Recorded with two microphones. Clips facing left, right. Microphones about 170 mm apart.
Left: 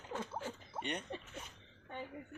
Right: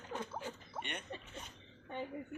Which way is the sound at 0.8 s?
35° left (ahead or behind).